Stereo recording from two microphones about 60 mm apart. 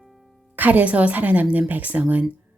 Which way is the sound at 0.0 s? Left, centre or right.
Centre.